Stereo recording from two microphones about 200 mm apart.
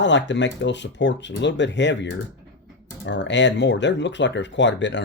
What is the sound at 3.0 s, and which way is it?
Speech, 60° left (ahead or behind).